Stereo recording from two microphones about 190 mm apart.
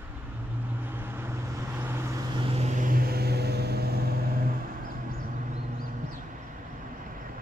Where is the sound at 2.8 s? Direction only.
50° right (ahead or behind).